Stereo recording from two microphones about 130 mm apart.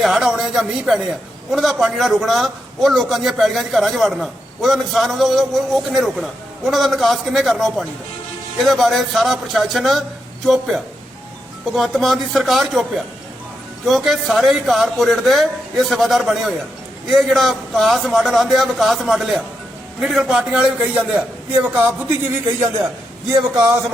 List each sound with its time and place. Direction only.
0.0 s a sound: 5° right (ahead or behind)
1.5 s a man's voice: centre (ahead or behind)
23.3 s speech: 25° right (ahead or behind)